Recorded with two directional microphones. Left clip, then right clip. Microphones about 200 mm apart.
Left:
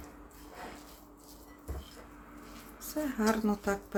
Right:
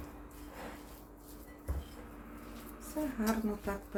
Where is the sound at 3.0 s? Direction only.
50° left (ahead or behind).